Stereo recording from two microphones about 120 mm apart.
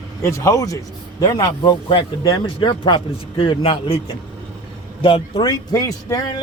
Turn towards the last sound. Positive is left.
turn(degrees=30)  # may be behind; listen again after turning